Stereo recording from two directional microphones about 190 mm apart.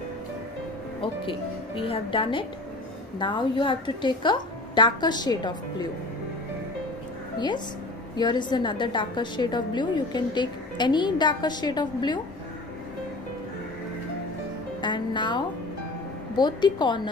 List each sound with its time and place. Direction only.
1.8 s a woman's voice: 30° left (ahead or behind)
7.3 s a woman's voice: 25° left (ahead or behind)
14.8 s music: 25° left (ahead or behind)
16.3 s a woman's voice: 20° left (ahead or behind)